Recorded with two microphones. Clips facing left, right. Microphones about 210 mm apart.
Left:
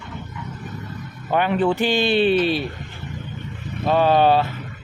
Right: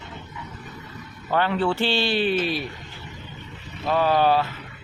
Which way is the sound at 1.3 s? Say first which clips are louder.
Left 3 dB; 15° left (ahead or behind).